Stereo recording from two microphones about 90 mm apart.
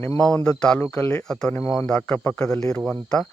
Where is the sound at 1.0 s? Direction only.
25° left (ahead or behind).